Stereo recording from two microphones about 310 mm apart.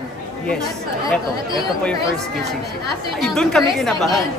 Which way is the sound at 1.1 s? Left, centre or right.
Centre.